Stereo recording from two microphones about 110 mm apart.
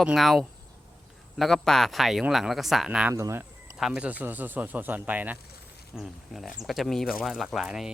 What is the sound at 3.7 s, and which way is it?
Speech, 10° right (ahead or behind).